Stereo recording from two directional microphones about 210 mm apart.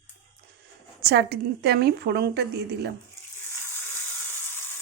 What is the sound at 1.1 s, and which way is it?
A woman's voice, 50° right (ahead or behind).